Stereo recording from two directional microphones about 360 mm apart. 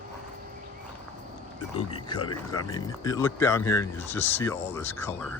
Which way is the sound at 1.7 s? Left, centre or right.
Left.